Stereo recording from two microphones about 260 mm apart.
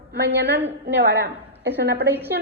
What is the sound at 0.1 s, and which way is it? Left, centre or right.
A woman's voice, right.